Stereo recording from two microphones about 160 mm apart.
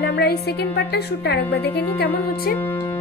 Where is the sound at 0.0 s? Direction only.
90° left.